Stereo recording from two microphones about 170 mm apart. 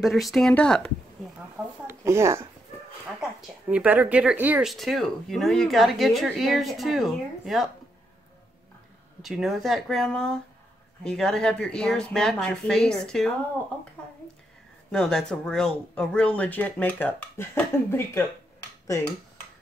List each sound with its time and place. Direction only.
0.0 s speech: centre (ahead or behind)
1.9 s speech: 15° right (ahead or behind)
3.2 s speech: 5° right (ahead or behind)
9.2 s speech: centre (ahead or behind)
14.9 s speech: 5° left (ahead or behind)